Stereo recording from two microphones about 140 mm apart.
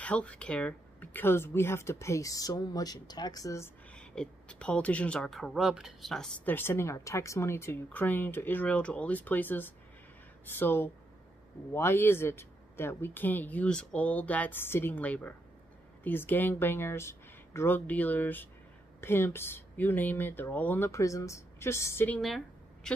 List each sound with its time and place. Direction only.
0.0 s speech: 10° left (ahead or behind)
3.9 s speech: 5° left (ahead or behind)
6.5 s speech: 15° left (ahead or behind)
22.8 s speech: 5° left (ahead or behind)